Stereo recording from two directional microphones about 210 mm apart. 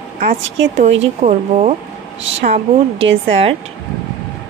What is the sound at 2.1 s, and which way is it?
Speech, 60° right (ahead or behind).